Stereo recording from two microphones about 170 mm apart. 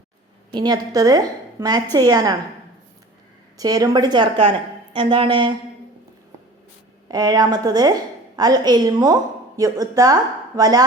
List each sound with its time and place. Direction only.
0.5 s a woman's voice: 25° right (ahead or behind)
3.6 s a woman's voice: 20° right (ahead or behind)
7.1 s a woman's voice: 25° right (ahead or behind)